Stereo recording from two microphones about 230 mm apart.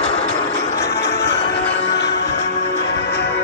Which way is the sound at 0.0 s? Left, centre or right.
Left.